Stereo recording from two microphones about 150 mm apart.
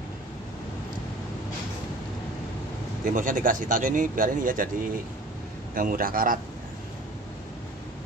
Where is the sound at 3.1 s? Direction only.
60° right (ahead or behind).